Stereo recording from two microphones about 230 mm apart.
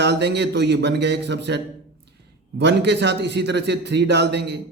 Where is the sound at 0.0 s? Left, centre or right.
Right.